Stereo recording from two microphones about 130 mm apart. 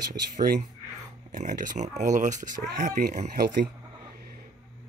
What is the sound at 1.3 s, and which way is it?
Speech, 80° right.